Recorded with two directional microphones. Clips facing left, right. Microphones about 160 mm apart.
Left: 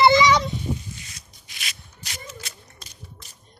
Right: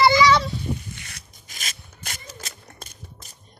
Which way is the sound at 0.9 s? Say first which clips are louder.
Right 1 dB; 65° right (ahead or behind).